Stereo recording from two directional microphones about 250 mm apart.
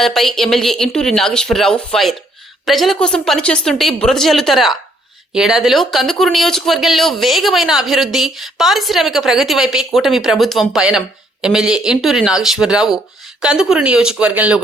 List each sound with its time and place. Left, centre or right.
0.0 s speech: centre